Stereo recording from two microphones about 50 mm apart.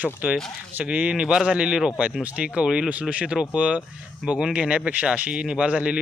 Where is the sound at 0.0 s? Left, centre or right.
Right.